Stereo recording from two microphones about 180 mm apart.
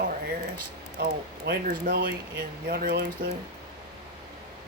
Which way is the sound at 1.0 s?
60° right (ahead or behind).